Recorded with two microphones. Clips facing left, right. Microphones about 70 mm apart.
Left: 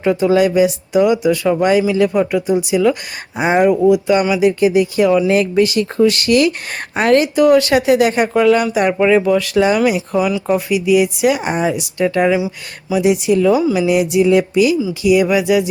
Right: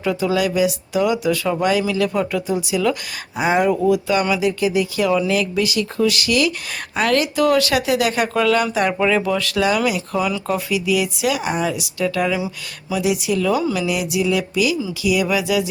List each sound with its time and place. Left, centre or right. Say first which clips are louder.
0.0 s speech: left 6 dB; left
5.3 s speech: left 6 dB; left; by 13.8 s centre
13.8 s speech: left 7 dB; left